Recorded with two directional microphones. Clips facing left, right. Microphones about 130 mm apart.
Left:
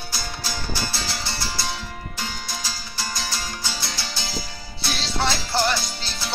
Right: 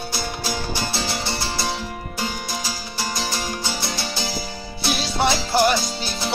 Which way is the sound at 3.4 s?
20° right (ahead or behind).